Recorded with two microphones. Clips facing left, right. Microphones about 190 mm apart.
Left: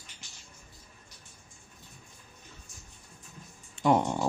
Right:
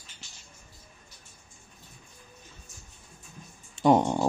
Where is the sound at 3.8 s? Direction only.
25° right (ahead or behind).